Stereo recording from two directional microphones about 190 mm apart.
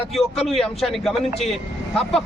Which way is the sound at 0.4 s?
Centre (ahead or behind).